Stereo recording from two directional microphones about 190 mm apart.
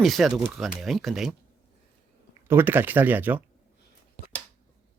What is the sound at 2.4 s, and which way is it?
Speech, 10° right (ahead or behind).